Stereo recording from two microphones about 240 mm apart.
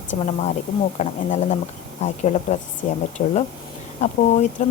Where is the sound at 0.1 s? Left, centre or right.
Left.